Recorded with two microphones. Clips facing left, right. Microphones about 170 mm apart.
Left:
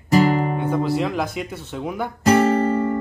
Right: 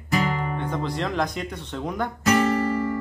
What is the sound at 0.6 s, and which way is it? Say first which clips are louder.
Speech: left 6 dB; 5° left (ahead or behind).